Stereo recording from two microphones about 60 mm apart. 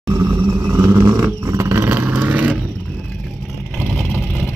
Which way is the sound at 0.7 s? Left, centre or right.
Right.